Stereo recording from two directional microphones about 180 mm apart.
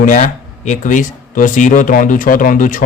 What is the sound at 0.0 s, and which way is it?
Speech, 45° left (ahead or behind).